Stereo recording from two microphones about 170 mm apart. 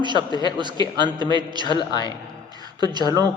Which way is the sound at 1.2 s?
25° right (ahead or behind).